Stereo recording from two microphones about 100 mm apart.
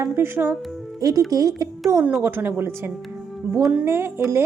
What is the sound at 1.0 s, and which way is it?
Speech, 35° right (ahead or behind).